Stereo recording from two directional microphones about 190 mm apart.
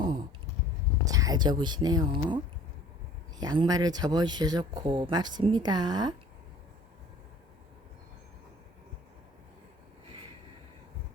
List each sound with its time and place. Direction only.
1.0 s speech: 20° right (ahead or behind)